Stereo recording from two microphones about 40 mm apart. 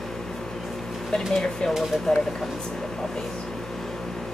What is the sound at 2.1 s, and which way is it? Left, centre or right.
Speech, centre.